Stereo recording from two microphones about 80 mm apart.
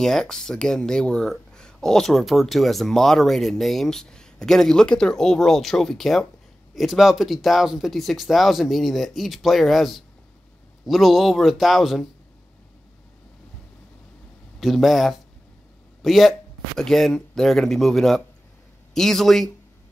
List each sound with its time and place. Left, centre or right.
0.0 s speech: centre
14.6 s speech: centre